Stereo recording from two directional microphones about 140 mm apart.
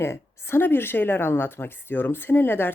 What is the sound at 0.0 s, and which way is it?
A woman's voice, 20° left (ahead or behind).